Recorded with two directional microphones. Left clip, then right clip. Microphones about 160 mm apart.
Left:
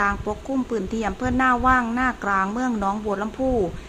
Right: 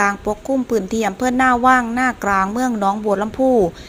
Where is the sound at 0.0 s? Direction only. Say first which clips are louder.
Right 5 dB; 20° right (ahead or behind).